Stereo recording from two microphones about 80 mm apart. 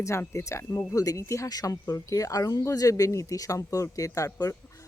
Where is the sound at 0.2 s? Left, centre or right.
Left.